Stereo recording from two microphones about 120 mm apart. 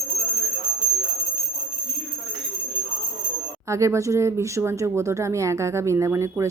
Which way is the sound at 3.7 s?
25° right (ahead or behind).